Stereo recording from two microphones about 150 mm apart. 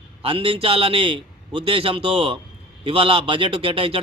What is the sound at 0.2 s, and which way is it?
A man's voice, 35° right (ahead or behind).